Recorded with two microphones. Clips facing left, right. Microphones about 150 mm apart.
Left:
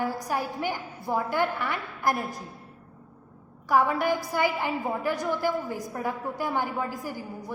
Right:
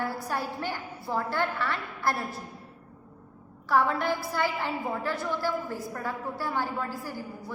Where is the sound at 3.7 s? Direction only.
10° left (ahead or behind).